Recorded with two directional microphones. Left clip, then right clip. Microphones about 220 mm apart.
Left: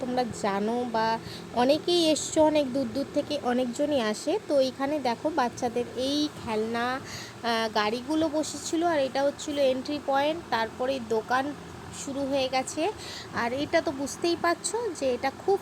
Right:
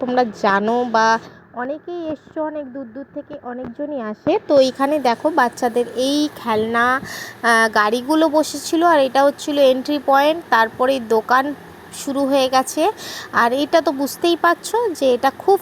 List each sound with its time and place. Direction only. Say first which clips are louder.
0.1 s a woman's voice: right 12 dB; 10° right (ahead or behind)